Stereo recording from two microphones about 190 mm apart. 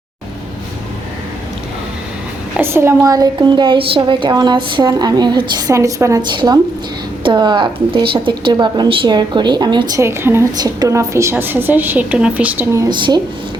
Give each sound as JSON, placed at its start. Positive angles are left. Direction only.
{"t": 2.6, "sound": "a woman's voice", "side_deg": -15}